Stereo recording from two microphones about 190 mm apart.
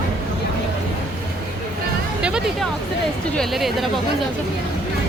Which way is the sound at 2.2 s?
5° right (ahead or behind).